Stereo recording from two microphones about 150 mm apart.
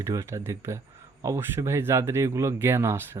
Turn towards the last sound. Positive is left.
turn(degrees=-20)  # may be behind; listen again after turning